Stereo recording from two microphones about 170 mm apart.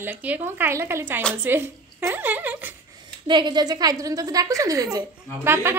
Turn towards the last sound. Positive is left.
turn(degrees=-15)  # may be behind; listen again after turning